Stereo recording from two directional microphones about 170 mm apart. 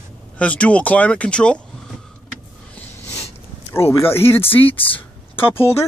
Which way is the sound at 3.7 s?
15° left (ahead or behind).